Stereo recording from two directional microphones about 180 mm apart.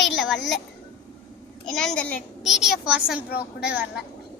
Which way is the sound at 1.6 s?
5° left (ahead or behind).